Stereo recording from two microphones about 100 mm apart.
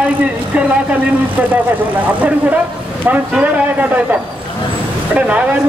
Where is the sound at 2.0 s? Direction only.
15° right (ahead or behind).